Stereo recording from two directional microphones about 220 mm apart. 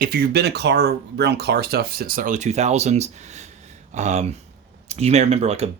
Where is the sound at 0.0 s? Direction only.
45° right (ahead or behind).